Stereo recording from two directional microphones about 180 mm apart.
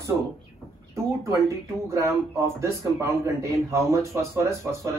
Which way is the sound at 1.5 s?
15° right (ahead or behind).